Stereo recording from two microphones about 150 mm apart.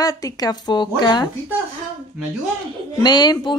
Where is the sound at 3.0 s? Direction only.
30° left (ahead or behind).